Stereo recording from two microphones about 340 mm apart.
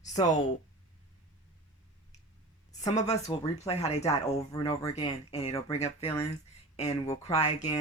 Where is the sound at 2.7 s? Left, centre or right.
Centre.